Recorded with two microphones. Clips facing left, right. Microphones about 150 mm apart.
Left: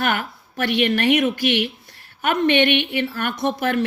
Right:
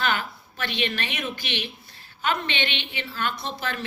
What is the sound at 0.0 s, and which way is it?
A woman's voice, 65° left (ahead or behind).